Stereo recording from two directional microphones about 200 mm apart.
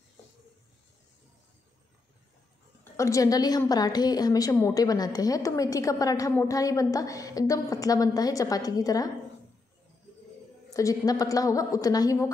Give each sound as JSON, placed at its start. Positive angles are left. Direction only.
{"t": 2.8, "sound": "a woman's voice", "side_deg": 15}
{"t": 10.7, "sound": "a woman's voice", "side_deg": 15}